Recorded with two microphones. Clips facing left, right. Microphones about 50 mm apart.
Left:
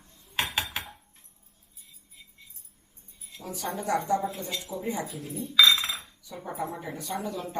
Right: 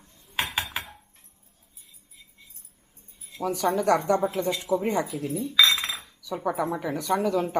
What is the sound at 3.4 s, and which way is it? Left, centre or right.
Speech, right.